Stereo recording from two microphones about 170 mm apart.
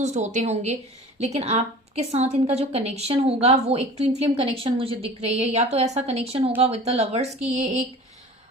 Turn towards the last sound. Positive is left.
turn(degrees=-40)  # may be behind; listen again after turning